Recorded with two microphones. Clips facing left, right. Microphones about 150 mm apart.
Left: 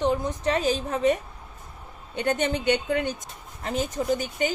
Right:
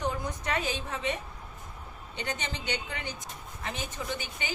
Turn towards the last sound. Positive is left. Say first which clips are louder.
# left 11 dB
turn(degrees=40)  # may be behind; listen again after turning